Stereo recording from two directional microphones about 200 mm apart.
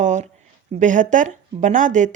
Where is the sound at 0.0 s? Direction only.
35° right (ahead or behind).